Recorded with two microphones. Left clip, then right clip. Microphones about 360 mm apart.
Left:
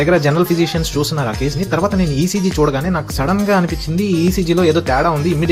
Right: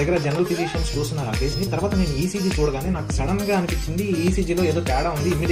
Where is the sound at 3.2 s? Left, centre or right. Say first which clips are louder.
Left 7 dB; left.